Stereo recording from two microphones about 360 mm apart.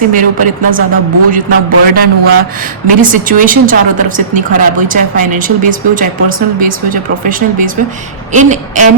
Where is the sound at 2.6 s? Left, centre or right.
Right.